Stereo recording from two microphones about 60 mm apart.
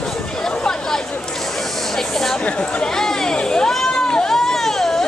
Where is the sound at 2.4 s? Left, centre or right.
Left.